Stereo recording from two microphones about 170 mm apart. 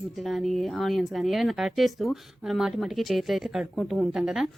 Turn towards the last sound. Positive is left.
turn(degrees=-5)  # may be behind; listen again after turning